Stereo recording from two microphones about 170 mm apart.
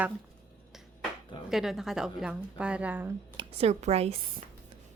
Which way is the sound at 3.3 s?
30° right (ahead or behind).